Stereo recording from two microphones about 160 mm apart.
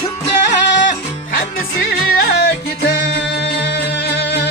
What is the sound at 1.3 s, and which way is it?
Music, 65° left (ahead or behind).